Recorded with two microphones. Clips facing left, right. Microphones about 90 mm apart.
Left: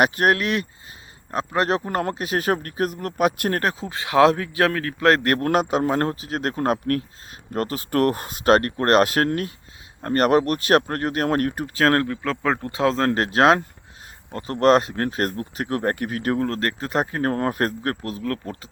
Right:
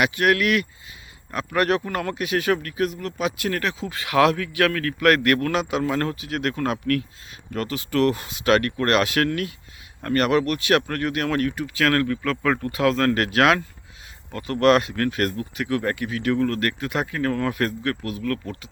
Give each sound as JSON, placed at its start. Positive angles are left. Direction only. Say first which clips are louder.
{"t": 0.0, "sound": "speech", "louder": "left 1 dB", "side_deg": 40}